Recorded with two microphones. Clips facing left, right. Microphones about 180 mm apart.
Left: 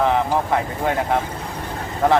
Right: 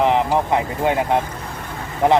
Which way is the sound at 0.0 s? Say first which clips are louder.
Right 2 dB; 20° right (ahead or behind).